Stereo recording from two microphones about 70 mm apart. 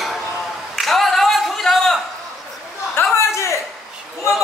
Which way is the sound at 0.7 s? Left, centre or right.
Centre.